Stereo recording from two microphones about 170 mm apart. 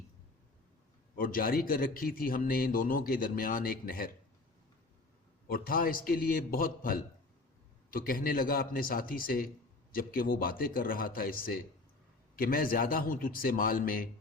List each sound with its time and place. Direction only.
1.1 s a man's voice: 55° left (ahead or behind)
5.5 s a man's voice: 55° left (ahead or behind)